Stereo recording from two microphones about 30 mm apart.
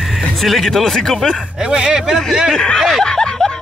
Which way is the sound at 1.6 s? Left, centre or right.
Right.